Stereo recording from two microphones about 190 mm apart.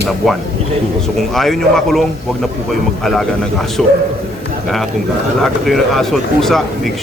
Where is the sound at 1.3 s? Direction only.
Centre (ahead or behind).